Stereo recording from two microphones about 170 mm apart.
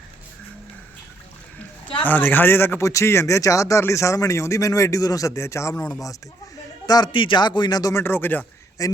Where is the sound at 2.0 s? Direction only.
10° left (ahead or behind).